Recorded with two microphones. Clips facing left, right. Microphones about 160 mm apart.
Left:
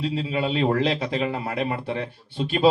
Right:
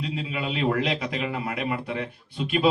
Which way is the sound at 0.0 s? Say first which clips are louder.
Left 5 dB; 30° left (ahead or behind).